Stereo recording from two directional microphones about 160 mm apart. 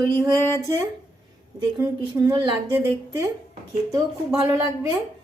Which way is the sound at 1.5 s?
20° right (ahead or behind).